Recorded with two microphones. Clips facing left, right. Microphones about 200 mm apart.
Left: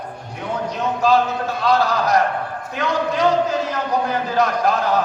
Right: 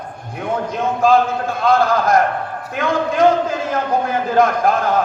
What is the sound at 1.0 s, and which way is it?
A man's voice, 50° right (ahead or behind).